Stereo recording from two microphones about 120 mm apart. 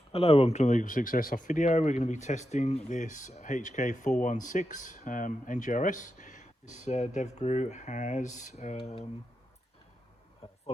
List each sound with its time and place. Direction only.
0.1 s speech: 55° left (ahead or behind); by 9.0 s 75° left (ahead or behind)